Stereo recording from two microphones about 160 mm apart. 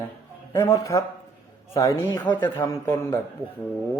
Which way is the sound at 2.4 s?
15° left (ahead or behind).